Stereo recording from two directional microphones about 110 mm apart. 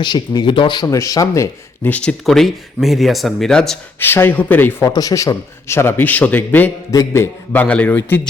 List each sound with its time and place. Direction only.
0.0 s speech: 45° left (ahead or behind)
0.9 s speech: 30° left (ahead or behind)
1.8 s speech: 10° left (ahead or behind)
4.0 s a man's voice: 20° left (ahead or behind)
4.8 s a man's voice: 35° left (ahead or behind); by 6.7 s 15° left (ahead or behind)
6.9 s a man's voice: 30° left (ahead or behind)